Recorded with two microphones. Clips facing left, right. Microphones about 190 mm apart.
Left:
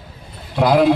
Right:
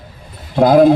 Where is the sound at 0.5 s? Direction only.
50° right (ahead or behind).